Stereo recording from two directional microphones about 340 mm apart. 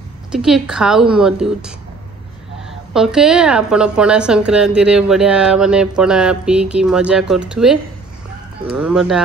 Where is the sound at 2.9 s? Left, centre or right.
Centre.